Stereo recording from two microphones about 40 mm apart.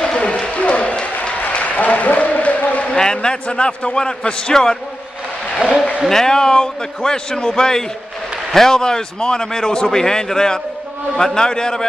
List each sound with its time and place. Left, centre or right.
0.0 s run: left
0.6 s a sound: left
1.5 s applause: left
2.9 s a man's voice: centre
5.6 s a man's voice: right
6.0 s a man's voice: centre